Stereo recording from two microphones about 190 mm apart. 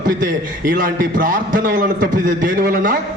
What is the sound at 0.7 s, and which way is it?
A man's voice, 45° right (ahead or behind).